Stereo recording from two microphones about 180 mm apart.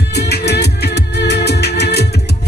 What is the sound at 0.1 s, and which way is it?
Music, 65° left (ahead or behind).